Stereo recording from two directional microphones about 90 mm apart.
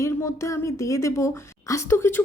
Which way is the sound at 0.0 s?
35° left (ahead or behind).